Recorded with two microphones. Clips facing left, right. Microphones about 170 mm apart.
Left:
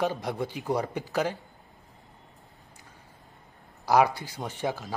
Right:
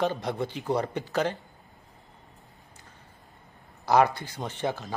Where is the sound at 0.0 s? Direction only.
10° left (ahead or behind).